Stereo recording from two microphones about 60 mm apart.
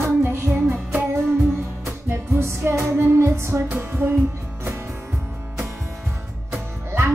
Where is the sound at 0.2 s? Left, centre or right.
Right.